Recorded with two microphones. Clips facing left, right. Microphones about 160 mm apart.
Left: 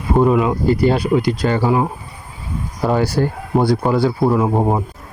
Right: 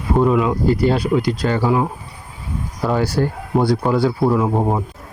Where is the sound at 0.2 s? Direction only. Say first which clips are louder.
Left 1 dB; 5° left (ahead or behind).